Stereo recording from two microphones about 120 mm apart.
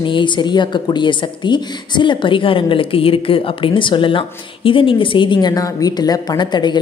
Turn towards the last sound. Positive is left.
turn(degrees=40)  # may be behind; listen again after turning